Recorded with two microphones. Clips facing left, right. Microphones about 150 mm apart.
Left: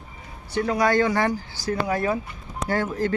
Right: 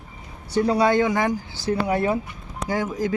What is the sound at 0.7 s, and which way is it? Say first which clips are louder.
Speech: right 1 dB; 25° right (ahead or behind).